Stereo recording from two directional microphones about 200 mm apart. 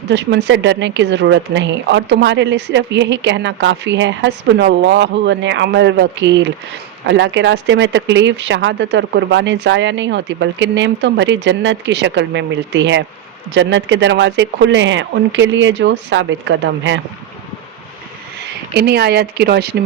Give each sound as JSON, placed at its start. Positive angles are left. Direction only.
{"t": 0.1, "sound": "speech", "side_deg": -60}
{"t": 18.7, "sound": "speech", "side_deg": -55}